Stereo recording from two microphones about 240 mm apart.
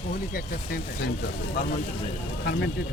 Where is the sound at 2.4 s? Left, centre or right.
Left.